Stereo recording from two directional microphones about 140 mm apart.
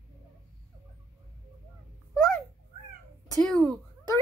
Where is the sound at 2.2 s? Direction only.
5° left (ahead or behind).